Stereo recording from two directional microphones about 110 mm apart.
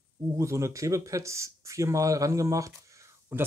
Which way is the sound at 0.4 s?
25° right (ahead or behind).